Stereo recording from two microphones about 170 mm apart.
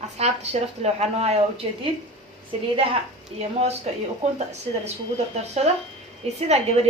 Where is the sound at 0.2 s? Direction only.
40° right (ahead or behind).